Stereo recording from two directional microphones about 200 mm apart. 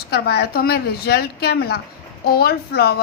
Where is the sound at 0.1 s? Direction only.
55° left (ahead or behind).